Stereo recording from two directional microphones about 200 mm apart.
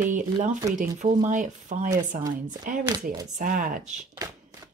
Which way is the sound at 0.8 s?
35° right (ahead or behind).